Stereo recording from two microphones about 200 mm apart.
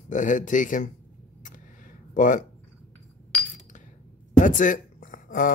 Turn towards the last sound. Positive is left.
turn(degrees=40)  # may be behind; listen again after turning